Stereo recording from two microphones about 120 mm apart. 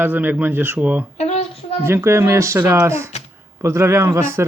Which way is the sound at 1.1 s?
60° left (ahead or behind).